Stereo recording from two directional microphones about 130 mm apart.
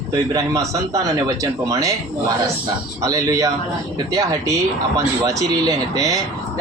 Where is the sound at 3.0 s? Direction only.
25° right (ahead or behind).